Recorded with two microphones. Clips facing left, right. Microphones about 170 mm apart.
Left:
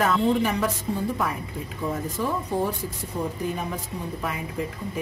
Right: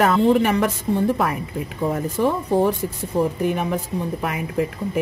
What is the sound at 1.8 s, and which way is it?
A woman's voice, 60° right (ahead or behind).